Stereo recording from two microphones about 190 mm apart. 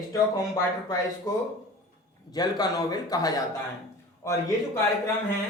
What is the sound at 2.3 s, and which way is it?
Speech, 20° left (ahead or behind).